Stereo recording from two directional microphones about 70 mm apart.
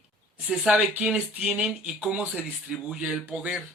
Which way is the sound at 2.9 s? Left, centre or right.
Centre.